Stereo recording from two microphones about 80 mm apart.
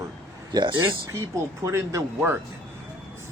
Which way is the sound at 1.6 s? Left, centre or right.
Right.